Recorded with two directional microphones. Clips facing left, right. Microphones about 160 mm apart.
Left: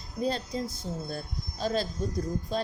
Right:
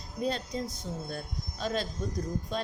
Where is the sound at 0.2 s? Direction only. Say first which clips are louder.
Left 2 dB; 35° left (ahead or behind).